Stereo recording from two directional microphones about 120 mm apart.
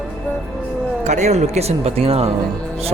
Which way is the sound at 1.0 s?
75° right (ahead or behind).